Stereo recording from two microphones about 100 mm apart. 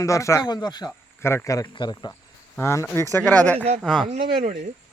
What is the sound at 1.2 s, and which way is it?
Speech, 30° left (ahead or behind).